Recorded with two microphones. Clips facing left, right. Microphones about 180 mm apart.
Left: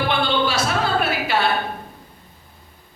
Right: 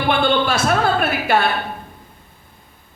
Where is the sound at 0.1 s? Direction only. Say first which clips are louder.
Right 8 dB; 50° right (ahead or behind).